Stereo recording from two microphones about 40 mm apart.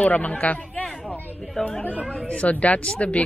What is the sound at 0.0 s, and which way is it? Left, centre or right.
Speech, left.